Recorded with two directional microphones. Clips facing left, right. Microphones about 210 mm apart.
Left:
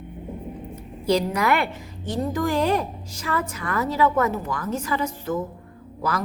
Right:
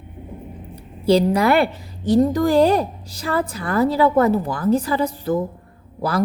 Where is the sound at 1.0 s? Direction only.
30° right (ahead or behind).